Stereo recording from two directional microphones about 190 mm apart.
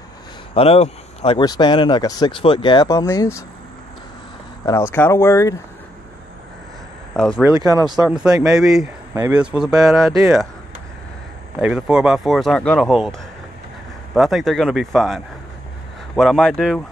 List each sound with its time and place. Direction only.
0.6 s speech: 30° left (ahead or behind); by 3.4 s 15° left (ahead or behind)
4.6 s speech: 15° left (ahead or behind)
7.2 s speech: 5° left (ahead or behind)
7.4 s speech: 20° right (ahead or behind)
8.1 s speech: 5° right (ahead or behind)
11.6 s speech: 5° right (ahead or behind)
14.1 s speech: centre (ahead or behind)